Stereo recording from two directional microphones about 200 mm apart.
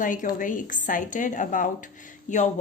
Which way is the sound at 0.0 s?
40° left (ahead or behind).